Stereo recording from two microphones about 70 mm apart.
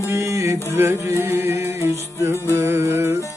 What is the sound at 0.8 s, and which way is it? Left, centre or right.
Music, right.